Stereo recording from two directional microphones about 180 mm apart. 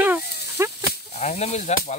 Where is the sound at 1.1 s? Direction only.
35° left (ahead or behind).